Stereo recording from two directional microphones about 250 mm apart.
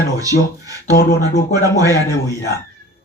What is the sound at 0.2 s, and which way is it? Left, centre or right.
Speech, centre.